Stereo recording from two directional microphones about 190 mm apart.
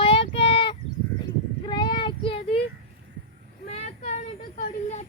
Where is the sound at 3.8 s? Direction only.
35° left (ahead or behind).